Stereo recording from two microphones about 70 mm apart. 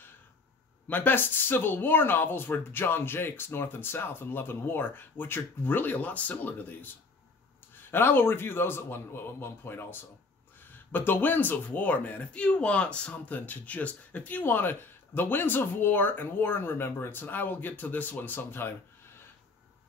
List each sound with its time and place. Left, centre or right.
0.8 s a man's voice: left